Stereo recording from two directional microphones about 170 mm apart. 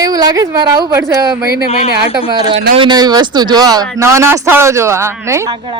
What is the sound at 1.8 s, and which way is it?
Speech, 75° right (ahead or behind).